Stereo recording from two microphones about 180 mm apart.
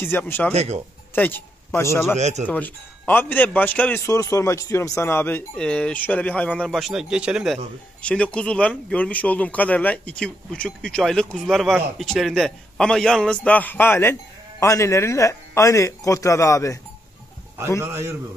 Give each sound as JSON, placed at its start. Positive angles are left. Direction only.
{"t": 0.0, "sound": "a man's voice", "side_deg": 10}
{"t": 0.6, "sound": "speech", "side_deg": -35}
{"t": 1.1, "sound": "a man's voice", "side_deg": 10}
{"t": 2.1, "sound": "speech", "side_deg": -40}
{"t": 2.4, "sound": "a man's voice", "side_deg": 10}
{"t": 8.0, "sound": "a man's voice", "side_deg": 5}